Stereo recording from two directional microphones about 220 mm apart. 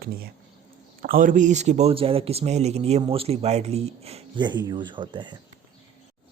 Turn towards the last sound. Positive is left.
turn(degrees=-20)  # may be behind; listen again after turning